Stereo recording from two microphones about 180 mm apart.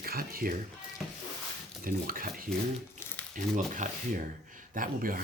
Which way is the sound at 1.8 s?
50° right (ahead or behind).